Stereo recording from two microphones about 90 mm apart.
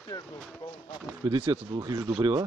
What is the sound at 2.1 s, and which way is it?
Speech, 60° right (ahead or behind).